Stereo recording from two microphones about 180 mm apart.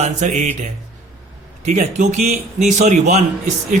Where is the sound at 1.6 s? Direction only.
40° right (ahead or behind).